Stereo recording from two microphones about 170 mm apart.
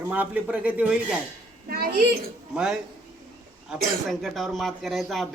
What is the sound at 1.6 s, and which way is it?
Speech, 65° right (ahead or behind).